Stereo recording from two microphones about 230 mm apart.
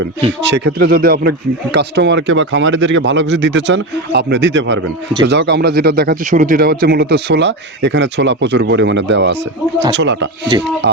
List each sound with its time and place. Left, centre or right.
0.4 s speech: right